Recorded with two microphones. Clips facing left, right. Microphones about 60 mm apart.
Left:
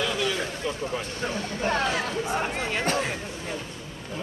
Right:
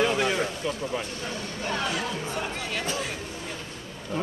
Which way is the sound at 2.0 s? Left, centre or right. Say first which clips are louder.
Left 3 dB; left.